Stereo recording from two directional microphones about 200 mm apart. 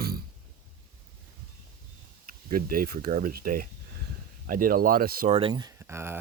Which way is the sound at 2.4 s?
45° right (ahead or behind).